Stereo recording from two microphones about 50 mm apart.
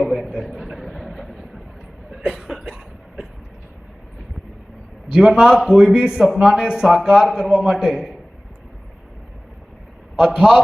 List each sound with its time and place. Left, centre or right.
0.0 s a sound: centre
2.3 s cough: centre
5.1 s speech: centre
10.2 s speech: centre